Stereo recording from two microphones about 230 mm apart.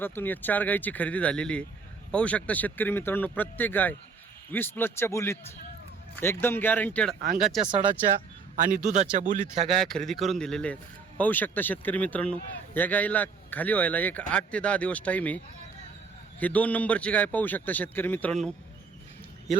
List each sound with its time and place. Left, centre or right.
0.0 s a man's voice: centre
6.4 s a man's voice: centre
8.5 s a man's voice: right
9.6 s a man's voice: centre
16.4 s a man's voice: centre